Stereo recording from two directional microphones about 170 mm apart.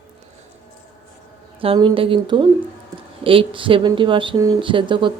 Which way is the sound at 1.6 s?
30° right (ahead or behind).